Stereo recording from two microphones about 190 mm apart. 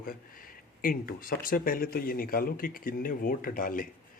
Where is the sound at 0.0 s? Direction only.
50° left (ahead or behind).